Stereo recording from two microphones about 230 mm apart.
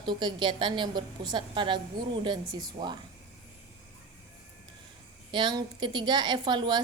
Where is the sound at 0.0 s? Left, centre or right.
Centre.